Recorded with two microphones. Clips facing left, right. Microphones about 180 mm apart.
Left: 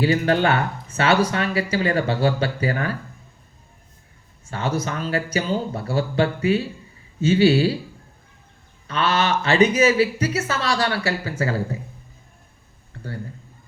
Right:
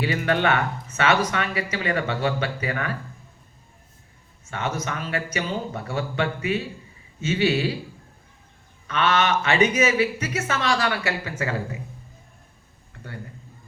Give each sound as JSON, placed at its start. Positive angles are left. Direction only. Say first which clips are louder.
{"t": 0.0, "sound": "speech", "louder": "left 4 dB", "side_deg": 30}
{"t": 4.4, "sound": "speech", "louder": "left 3 dB", "side_deg": 35}
{"t": 8.9, "sound": "speech", "louder": "even", "side_deg": 35}
{"t": 12.9, "sound": "a sound", "louder": "left 6 dB", "side_deg": 35}